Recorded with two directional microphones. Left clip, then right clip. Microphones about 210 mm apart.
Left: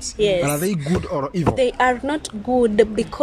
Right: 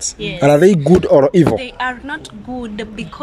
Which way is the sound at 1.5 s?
30° left (ahead or behind).